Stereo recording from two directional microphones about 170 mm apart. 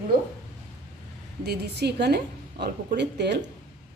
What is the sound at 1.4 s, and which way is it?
A woman's voice, 70° right (ahead or behind).